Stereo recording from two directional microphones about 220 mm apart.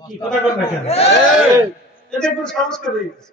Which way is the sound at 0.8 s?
30° left (ahead or behind).